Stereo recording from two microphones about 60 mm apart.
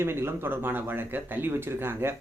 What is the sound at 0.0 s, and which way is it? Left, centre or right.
Speech, right.